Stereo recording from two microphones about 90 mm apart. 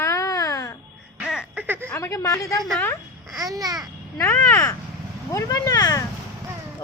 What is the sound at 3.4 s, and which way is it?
Babbling, 45° right (ahead or behind).